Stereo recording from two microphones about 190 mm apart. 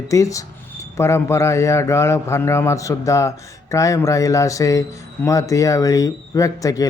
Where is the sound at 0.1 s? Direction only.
15° left (ahead or behind).